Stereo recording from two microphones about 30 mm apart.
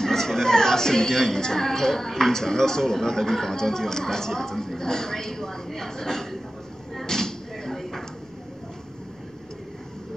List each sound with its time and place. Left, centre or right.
0.0 s speech: centre
6.9 s thump: centre